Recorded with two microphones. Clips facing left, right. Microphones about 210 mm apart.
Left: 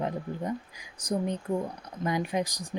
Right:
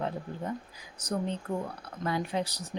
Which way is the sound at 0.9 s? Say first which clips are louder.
Left 3 dB; 10° left (ahead or behind).